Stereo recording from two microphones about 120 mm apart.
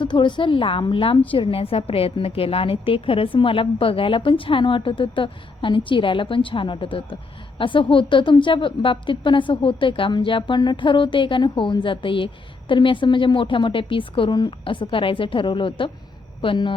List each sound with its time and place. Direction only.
0.0 s a woman's voice: 40° left (ahead or behind)